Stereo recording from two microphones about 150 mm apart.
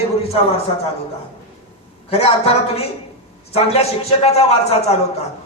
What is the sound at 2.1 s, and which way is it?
Speech, 40° left (ahead or behind).